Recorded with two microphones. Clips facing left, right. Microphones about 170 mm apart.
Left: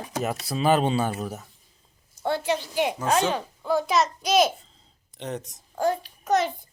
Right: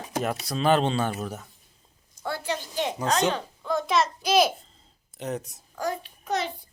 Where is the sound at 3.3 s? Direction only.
10° left (ahead or behind).